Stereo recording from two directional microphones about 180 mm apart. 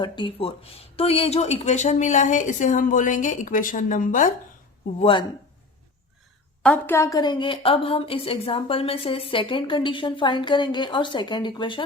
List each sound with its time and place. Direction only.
0.0 s speech: 30° left (ahead or behind); by 4.3 s 45° left (ahead or behind)
4.9 s speech: 30° left (ahead or behind)
6.6 s a woman's voice: 10° left (ahead or behind); by 11.8 s 25° left (ahead or behind)